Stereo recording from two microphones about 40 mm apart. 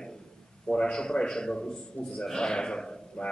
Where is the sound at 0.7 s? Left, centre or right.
Left.